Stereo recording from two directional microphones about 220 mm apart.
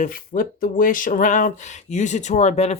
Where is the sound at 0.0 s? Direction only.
40° left (ahead or behind).